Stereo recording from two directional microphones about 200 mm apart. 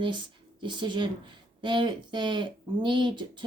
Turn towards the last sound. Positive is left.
turn(degrees=-25)  # may be behind; listen again after turning